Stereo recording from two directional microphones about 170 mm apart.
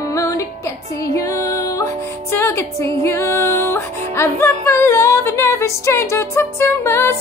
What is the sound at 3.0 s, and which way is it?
Music, 15° left (ahead or behind).